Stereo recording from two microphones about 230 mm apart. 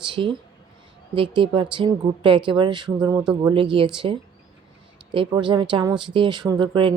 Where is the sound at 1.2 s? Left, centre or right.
Right.